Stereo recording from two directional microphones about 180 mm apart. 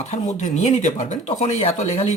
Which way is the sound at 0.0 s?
40° left (ahead or behind).